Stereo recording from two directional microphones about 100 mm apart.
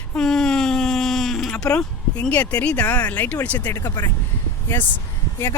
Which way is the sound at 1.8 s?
10° left (ahead or behind).